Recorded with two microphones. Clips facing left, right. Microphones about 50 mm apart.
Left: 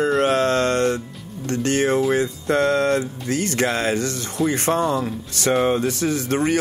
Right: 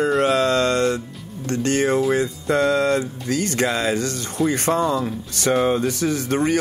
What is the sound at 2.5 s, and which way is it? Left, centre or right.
Speech, left.